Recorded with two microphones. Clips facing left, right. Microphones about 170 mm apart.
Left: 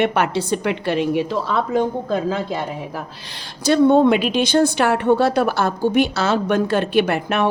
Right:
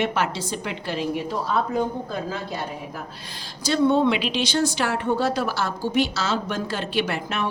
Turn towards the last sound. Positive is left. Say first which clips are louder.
# left 7 dB
turn(degrees=60)  # may be behind; listen again after turning